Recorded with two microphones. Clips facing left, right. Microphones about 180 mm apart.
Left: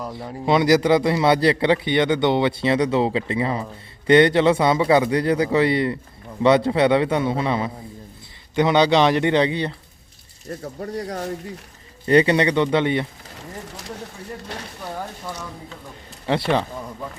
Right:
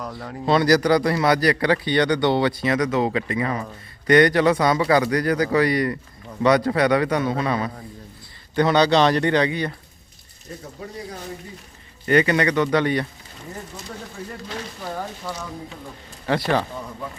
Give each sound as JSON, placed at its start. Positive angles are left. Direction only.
{"t": 0.1, "sound": "a man's voice", "side_deg": 20}
{"t": 10.5, "sound": "speech", "side_deg": 55}
{"t": 10.9, "sound": "speech", "side_deg": 75}
{"t": 12.0, "sound": "a man's voice", "side_deg": 30}
{"t": 16.2, "sound": "a man's voice", "side_deg": 20}